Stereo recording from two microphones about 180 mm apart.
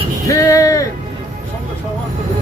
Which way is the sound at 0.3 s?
20° left (ahead or behind).